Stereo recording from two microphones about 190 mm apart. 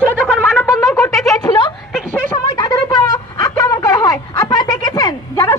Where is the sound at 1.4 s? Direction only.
25° left (ahead or behind).